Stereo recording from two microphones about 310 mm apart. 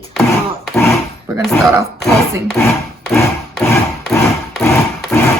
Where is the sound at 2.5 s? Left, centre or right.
Centre.